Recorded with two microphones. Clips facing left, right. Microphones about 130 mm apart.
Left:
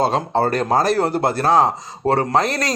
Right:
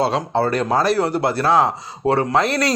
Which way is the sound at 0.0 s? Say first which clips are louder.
Left 1 dB; 45° left (ahead or behind).